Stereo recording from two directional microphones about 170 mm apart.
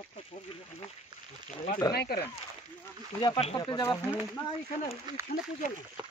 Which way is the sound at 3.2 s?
30° left (ahead or behind).